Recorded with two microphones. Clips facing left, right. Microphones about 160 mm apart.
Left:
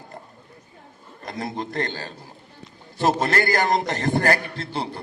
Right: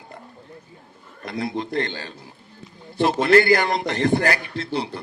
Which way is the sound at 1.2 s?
45° left (ahead or behind).